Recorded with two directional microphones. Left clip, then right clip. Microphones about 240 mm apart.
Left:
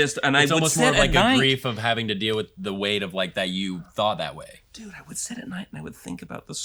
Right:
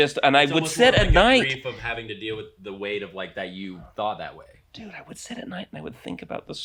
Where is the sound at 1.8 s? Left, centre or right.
Right.